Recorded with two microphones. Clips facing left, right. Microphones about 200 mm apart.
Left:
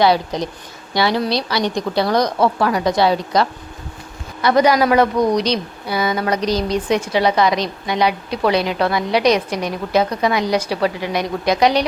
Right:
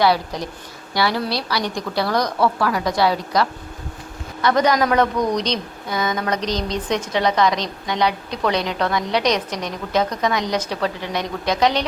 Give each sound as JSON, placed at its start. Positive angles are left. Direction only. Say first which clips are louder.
{"t": 0.0, "sound": "a woman's voice", "louder": "left 3 dB", "side_deg": 20}
{"t": 4.4, "sound": "a woman's voice", "louder": "left 3 dB", "side_deg": 10}